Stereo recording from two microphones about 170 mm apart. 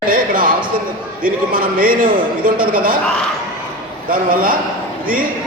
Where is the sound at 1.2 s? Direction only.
55° right (ahead or behind).